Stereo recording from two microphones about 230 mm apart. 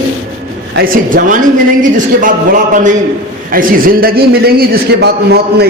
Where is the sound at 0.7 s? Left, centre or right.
Right.